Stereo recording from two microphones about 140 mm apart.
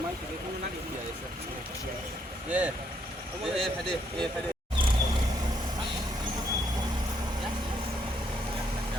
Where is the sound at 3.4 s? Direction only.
Centre (ahead or behind).